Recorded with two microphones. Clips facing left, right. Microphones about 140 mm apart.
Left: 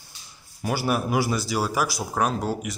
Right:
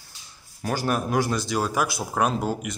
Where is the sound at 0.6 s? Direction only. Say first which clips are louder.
Left 1 dB; 10° left (ahead or behind).